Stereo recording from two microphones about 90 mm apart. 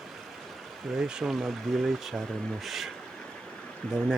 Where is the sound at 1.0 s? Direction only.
5° right (ahead or behind).